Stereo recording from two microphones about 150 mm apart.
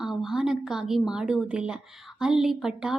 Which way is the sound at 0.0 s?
5° right (ahead or behind).